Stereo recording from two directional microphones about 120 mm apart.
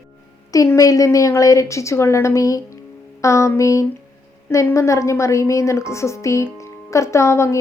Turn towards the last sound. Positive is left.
turn(degrees=25)  # may be behind; listen again after turning